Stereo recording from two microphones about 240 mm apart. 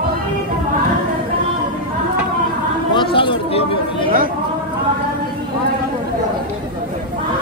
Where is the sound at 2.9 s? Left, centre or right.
Left.